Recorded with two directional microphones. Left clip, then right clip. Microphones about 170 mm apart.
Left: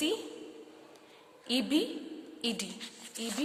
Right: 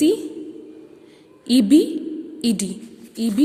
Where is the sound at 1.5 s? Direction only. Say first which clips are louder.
Right 15 dB; 30° right (ahead or behind).